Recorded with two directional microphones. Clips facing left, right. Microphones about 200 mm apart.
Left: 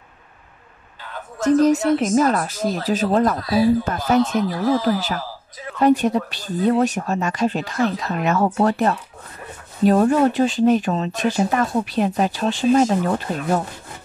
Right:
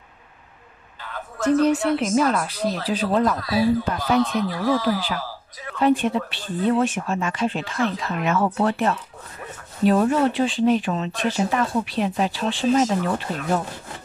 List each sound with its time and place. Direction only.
1.4 s speech: 40° left (ahead or behind)